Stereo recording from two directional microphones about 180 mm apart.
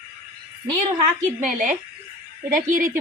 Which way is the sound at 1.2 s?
45° right (ahead or behind).